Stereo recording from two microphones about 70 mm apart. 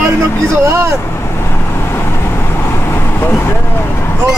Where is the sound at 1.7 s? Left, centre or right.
Left.